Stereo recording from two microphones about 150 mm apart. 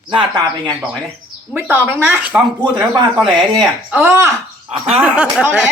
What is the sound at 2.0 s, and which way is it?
Speech, 10° right (ahead or behind).